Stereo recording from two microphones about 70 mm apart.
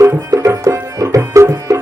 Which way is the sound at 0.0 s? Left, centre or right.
Right.